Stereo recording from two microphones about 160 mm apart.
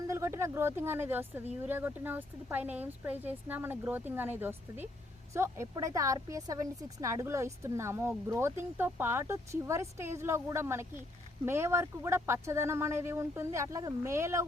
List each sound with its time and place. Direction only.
0.1 s speech: 15° right (ahead or behind)